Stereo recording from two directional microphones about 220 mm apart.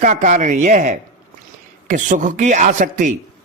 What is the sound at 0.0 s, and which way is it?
Speech, 35° right (ahead or behind).